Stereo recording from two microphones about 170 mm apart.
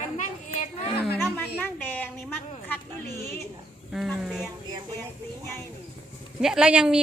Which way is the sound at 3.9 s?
Centre (ahead or behind).